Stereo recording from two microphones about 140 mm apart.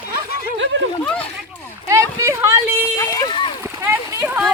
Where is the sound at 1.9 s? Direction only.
20° right (ahead or behind).